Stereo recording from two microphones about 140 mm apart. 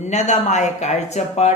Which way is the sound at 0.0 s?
55° left (ahead or behind).